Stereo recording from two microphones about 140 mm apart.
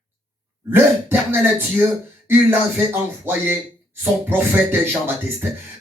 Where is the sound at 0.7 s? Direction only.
15° right (ahead or behind).